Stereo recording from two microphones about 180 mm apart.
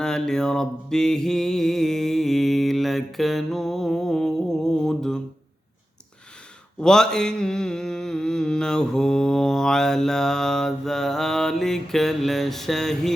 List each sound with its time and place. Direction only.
0.0 s mantra: 5° left (ahead or behind)
6.8 s mantra: 5° left (ahead or behind)